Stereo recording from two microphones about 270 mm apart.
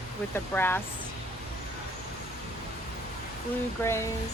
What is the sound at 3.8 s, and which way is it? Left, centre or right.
Speech, centre.